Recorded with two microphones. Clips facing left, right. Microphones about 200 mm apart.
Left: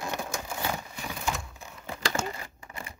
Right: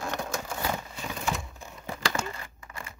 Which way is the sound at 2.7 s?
20° left (ahead or behind).